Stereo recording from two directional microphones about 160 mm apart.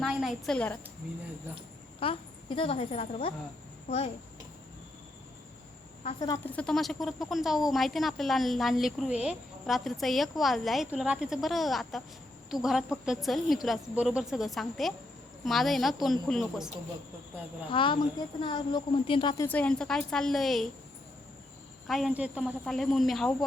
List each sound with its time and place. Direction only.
0.0 s a woman's voice: centre (ahead or behind)
2.0 s a woman's voice: 35° left (ahead or behind)
6.1 s a woman's voice: 25° left (ahead or behind)
6.4 s speech: 10° left (ahead or behind)
17.7 s a woman's voice: 30° left (ahead or behind)
19.5 s speech: 10° left (ahead or behind)
21.8 s a woman's voice: centre (ahead or behind)